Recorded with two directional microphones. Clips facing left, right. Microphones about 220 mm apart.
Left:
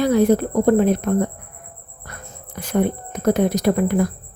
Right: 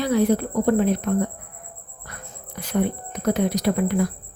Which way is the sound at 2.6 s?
50° left (ahead or behind).